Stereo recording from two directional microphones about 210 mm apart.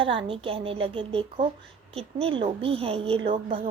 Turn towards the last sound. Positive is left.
turn(degrees=-25)  # may be behind; listen again after turning